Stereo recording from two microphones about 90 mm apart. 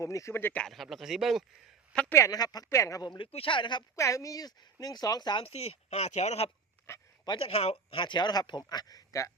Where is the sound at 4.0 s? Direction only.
35° left (ahead or behind); by 5.4 s 50° left (ahead or behind).